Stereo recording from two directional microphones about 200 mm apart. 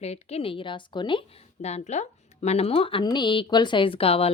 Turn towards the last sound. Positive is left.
turn(degrees=30)  # may be behind; listen again after turning